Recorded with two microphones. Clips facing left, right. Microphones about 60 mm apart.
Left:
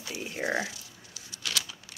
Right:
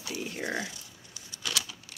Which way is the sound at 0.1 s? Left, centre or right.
Centre.